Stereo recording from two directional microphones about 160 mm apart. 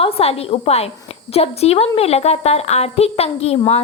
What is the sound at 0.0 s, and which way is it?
A woman's voice, 40° left (ahead or behind).